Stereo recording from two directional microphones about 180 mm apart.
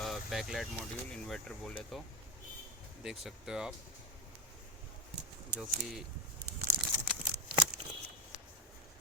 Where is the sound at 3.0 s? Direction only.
5° right (ahead or behind).